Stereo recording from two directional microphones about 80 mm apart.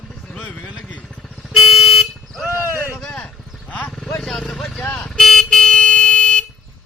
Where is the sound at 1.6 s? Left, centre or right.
Centre.